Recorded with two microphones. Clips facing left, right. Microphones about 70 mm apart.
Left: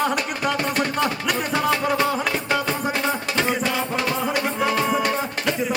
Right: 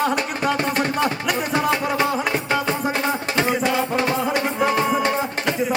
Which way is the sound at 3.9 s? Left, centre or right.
Right.